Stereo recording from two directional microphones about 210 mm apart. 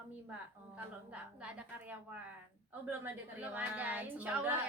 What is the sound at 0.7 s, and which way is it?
A woman's voice, 5° right (ahead or behind).